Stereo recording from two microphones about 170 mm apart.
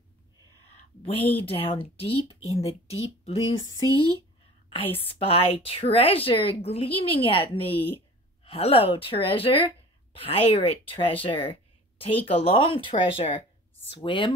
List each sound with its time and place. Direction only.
1.0 s a woman's voice: 35° left (ahead or behind)
4.6 s a woman's voice: 35° left (ahead or behind)